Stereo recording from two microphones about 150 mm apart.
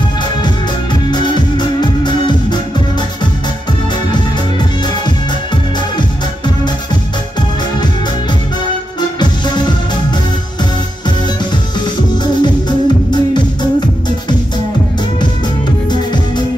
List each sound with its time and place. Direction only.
1.1 s music: 30° left (ahead or behind)
12.4 s music: 30° left (ahead or behind)